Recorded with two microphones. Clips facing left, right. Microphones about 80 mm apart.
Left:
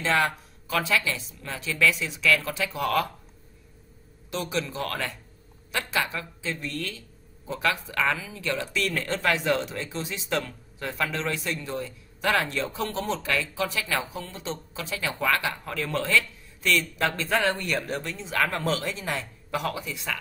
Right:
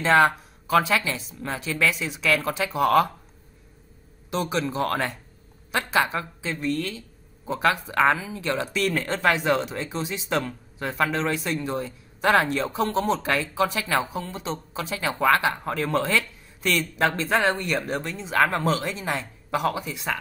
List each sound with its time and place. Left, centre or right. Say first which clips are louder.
0.0 s speech: right 6 dB; right
4.3 s speech: right 4 dB; right
6.4 s speech: right 5 dB; right